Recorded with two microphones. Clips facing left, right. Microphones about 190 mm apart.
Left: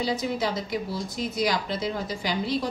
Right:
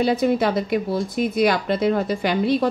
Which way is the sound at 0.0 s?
60° right (ahead or behind).